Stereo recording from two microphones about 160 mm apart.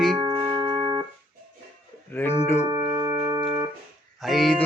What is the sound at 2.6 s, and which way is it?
Music, 20° right (ahead or behind).